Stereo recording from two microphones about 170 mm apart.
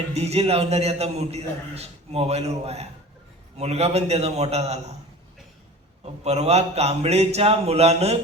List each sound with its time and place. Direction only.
0.1 s a man's voice: 40° right (ahead or behind)
6.2 s a man's voice: 40° right (ahead or behind)